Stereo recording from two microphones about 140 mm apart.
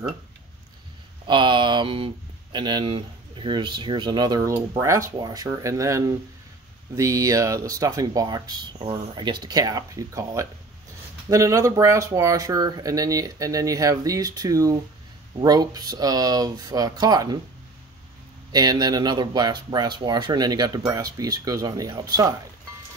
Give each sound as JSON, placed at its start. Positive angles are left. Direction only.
{"t": 1.2, "sound": "a sound", "side_deg": -35}
{"t": 2.5, "sound": "speech", "side_deg": -30}
{"t": 18.5, "sound": "speech", "side_deg": -30}